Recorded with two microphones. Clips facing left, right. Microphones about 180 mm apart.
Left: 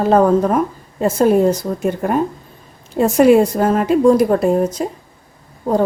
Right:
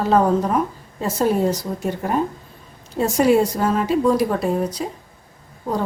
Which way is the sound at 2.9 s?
60° left (ahead or behind).